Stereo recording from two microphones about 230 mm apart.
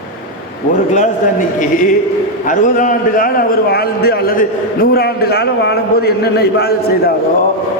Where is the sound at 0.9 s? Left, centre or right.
Left.